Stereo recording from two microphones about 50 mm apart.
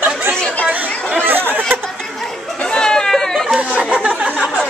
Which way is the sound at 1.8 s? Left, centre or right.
Centre.